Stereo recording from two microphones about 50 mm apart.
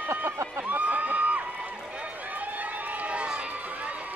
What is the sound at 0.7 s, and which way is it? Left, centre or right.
Speech, right.